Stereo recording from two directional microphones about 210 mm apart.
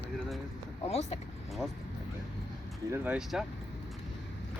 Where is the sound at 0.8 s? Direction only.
30° left (ahead or behind).